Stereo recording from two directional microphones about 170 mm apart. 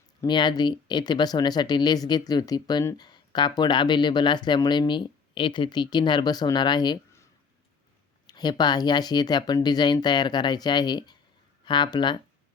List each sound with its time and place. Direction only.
0.2 s speech: 25° left (ahead or behind)
8.3 s speech: 25° left (ahead or behind)